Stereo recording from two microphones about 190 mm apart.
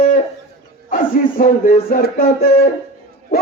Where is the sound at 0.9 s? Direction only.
45° left (ahead or behind).